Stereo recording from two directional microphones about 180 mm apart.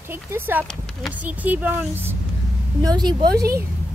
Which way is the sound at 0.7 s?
Centre (ahead or behind).